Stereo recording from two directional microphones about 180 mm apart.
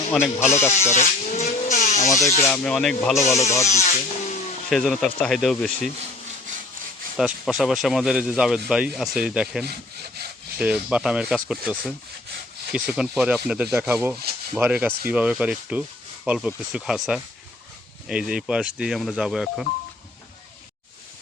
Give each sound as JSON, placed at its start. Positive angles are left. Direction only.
{"t": 0.1, "sound": "speech", "side_deg": 15}
{"t": 0.9, "sound": "vehicle", "side_deg": 40}
{"t": 2.0, "sound": "speech", "side_deg": 15}
{"t": 2.4, "sound": "speech", "side_deg": 5}
{"t": 3.2, "sound": "speech", "side_deg": 15}
{"t": 3.7, "sound": "speech", "side_deg": 40}
{"t": 4.7, "sound": "speech", "side_deg": 0}
{"t": 7.2, "sound": "speech", "side_deg": -5}
{"t": 9.6, "sound": "sawing", "side_deg": -60}
{"t": 10.6, "sound": "speech", "side_deg": -5}